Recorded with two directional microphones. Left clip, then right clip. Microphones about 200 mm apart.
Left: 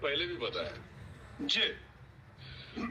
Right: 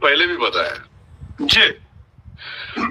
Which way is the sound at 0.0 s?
65° right (ahead or behind).